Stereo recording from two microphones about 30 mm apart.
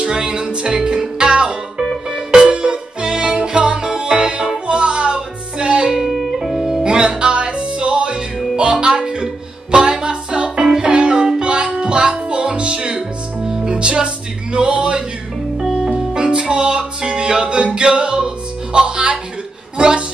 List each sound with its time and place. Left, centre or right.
0.0 s music: right
2.0 s music: right
3.5 s music: right
3.9 s music: right
5.9 s music: centre
6.8 s music: right
10.6 s music: centre; by 15.0 s right
15.6 s music: centre
16.2 s music: right